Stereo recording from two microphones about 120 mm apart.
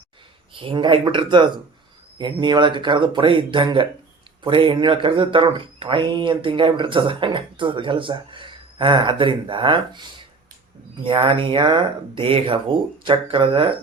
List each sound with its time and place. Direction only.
0.5 s speech: 45° right (ahead or behind)